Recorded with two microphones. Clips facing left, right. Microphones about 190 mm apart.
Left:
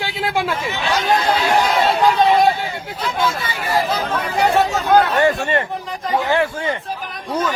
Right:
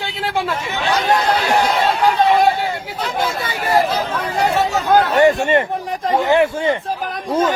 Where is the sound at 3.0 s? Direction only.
60° right (ahead or behind).